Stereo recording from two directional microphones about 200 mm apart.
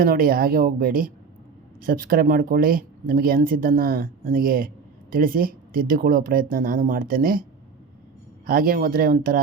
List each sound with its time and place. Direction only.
0.0 s speech: 45° right (ahead or behind)
8.4 s speech: 45° right (ahead or behind)